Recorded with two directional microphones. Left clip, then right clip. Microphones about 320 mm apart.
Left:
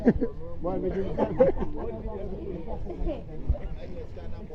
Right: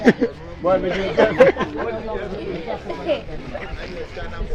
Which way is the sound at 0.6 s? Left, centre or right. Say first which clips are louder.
Right 11 dB; right.